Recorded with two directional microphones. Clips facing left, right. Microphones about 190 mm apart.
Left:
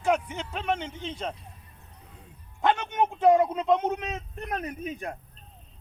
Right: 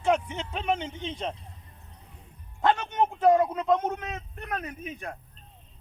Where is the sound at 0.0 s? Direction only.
5° left (ahead or behind).